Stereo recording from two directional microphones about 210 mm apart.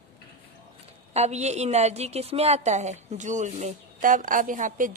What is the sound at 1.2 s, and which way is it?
A woman's voice, 30° right (ahead or behind).